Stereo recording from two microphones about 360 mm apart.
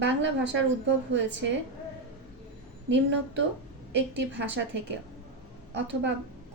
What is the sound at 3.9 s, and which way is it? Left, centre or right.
Speech, right.